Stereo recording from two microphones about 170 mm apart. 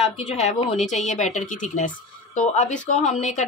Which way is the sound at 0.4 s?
40° left (ahead or behind).